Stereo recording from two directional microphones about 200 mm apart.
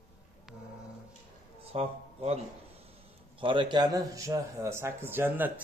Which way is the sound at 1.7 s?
30° right (ahead or behind).